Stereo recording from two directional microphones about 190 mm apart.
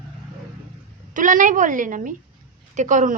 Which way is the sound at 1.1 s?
45° right (ahead or behind).